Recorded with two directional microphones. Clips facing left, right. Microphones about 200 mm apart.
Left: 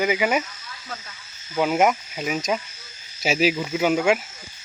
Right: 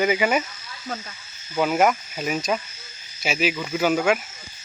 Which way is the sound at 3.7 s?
15° left (ahead or behind).